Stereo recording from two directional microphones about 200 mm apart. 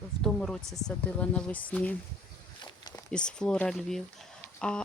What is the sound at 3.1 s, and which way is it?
Speech, 5° left (ahead or behind).